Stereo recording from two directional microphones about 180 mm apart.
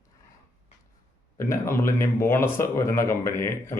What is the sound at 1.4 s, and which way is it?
Speech, 15° left (ahead or behind).